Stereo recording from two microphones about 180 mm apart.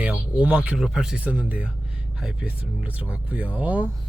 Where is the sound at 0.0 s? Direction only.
5° right (ahead or behind).